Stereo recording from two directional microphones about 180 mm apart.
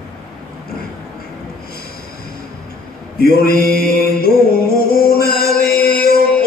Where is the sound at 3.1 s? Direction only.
55° left (ahead or behind).